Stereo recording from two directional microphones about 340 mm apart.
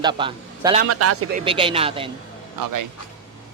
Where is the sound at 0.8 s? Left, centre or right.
Right.